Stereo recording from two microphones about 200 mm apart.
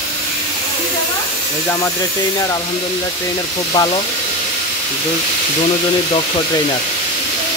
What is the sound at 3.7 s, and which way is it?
Speech, 20° left (ahead or behind).